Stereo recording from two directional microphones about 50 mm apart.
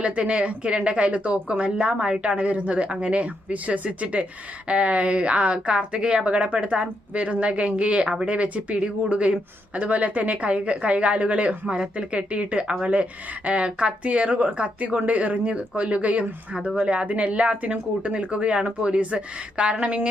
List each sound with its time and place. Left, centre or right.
0.0 s a woman's voice: right